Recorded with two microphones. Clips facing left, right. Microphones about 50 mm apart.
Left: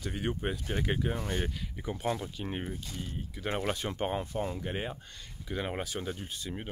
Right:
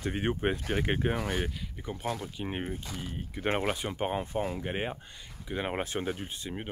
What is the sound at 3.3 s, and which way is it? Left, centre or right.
Speech, right.